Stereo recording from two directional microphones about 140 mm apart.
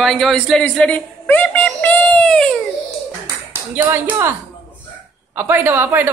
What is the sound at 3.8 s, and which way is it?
Speech, 15° right (ahead or behind).